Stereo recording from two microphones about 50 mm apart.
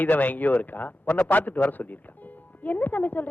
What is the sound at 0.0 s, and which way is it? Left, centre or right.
Speech, left.